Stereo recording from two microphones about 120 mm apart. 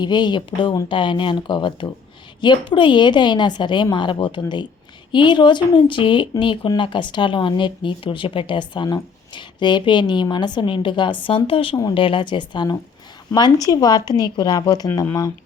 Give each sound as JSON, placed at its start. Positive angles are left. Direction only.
{"t": 0.0, "sound": "a woman's voice", "side_deg": 40}